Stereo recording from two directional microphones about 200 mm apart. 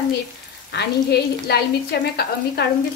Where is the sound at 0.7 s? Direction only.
55° left (ahead or behind).